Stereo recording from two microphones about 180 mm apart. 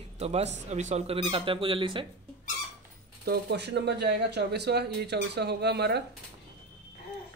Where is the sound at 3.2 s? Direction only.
65° right (ahead or behind).